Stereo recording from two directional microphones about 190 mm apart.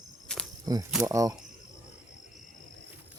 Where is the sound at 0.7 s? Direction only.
20° right (ahead or behind).